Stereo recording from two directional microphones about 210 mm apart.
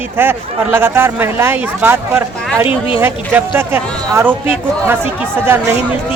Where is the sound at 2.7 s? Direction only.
25° left (ahead or behind).